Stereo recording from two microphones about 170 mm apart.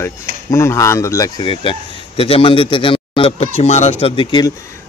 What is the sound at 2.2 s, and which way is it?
A man's voice, 30° left (ahead or behind).